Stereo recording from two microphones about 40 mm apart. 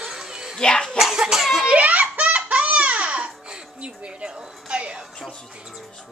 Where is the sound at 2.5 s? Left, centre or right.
Right.